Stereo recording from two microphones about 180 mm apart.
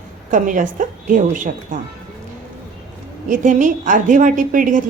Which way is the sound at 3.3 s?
45° right (ahead or behind).